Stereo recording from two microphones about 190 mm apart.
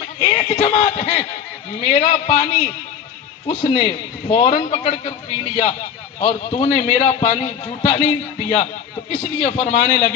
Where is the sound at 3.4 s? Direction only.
35° left (ahead or behind).